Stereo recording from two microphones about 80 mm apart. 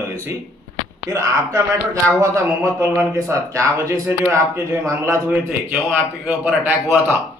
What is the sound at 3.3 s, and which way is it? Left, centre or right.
A man's voice, right.